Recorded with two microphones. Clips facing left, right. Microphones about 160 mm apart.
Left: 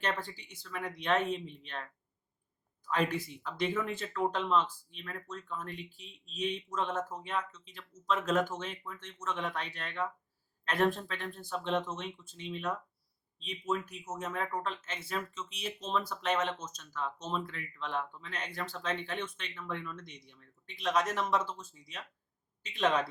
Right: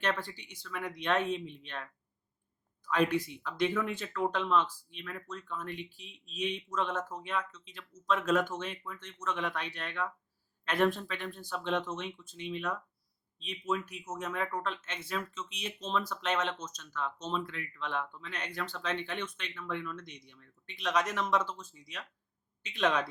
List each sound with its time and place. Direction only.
0.0 s speech: centre (ahead or behind)
2.9 s speech: centre (ahead or behind)
10.9 s speech: centre (ahead or behind)